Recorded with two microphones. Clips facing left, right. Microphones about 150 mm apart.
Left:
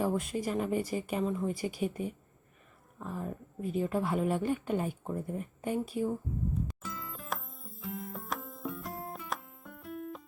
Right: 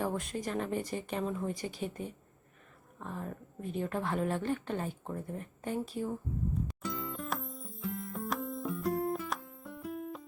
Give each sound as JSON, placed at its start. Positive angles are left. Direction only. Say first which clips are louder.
{"t": 0.0, "sound": "a woman's voice", "louder": "left 3 dB", "side_deg": 5}
{"t": 6.8, "sound": "music", "louder": "right 4 dB", "side_deg": 0}